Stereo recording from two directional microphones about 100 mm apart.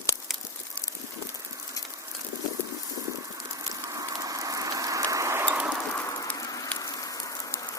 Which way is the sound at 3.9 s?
35° right (ahead or behind).